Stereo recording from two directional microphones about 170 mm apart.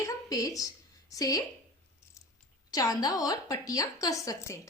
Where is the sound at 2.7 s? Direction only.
20° left (ahead or behind).